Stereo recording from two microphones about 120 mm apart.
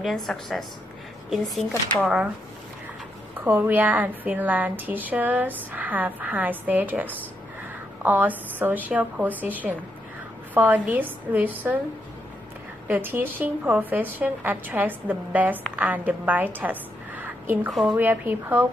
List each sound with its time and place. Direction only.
0.0 s a woman's voice: centre (ahead or behind)
3.4 s a woman's voice: 15° right (ahead or behind)
12.8 s a woman's voice: 15° right (ahead or behind)
17.6 s a woman's voice: 5° right (ahead or behind)
17.9 s a woman's voice: 15° right (ahead or behind)